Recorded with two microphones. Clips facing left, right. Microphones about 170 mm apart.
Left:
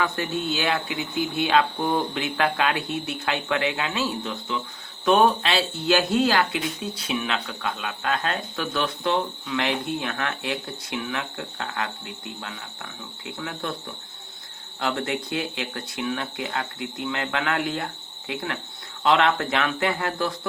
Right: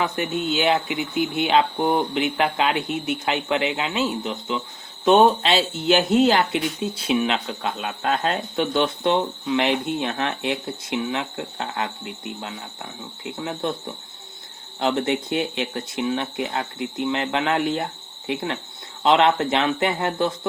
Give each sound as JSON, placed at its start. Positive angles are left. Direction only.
{"t": 0.0, "sound": "speech", "side_deg": -20}